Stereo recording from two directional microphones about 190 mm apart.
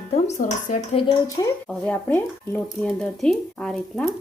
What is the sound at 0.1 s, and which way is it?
Speech, 40° left (ahead or behind).